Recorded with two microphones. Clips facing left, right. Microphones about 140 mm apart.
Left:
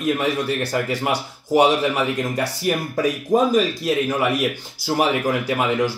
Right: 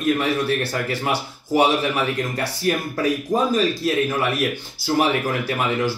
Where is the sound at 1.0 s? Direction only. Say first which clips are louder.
Left 1 dB; 15° left (ahead or behind).